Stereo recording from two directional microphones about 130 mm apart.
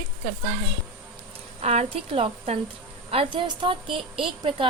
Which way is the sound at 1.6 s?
50° right (ahead or behind).